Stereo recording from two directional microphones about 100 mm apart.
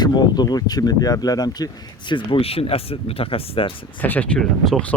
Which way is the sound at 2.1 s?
65° left (ahead or behind).